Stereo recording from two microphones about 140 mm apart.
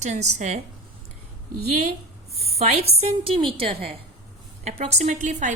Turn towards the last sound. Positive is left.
turn(degrees=-55)  # may be behind; listen again after turning